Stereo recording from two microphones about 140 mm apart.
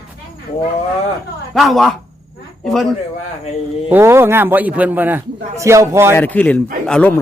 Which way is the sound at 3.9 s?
15° right (ahead or behind).